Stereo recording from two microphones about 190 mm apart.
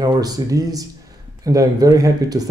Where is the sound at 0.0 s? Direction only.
20° right (ahead or behind).